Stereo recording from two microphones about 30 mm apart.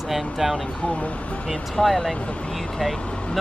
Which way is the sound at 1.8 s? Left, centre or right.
Left.